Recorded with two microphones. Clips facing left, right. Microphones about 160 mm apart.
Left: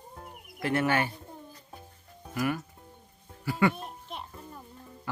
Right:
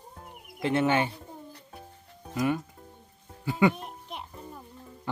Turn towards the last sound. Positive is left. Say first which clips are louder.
# right 1 dB
turn(degrees=-15)  # may be behind; listen again after turning